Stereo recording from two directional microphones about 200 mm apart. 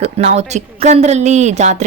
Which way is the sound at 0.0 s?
30° right (ahead or behind).